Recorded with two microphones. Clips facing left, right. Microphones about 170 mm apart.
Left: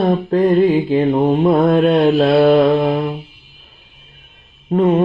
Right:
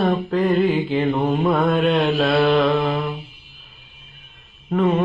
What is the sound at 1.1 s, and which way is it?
Mantra, 25° left (ahead or behind).